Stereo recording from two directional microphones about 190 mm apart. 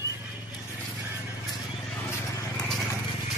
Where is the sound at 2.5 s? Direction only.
Centre (ahead or behind).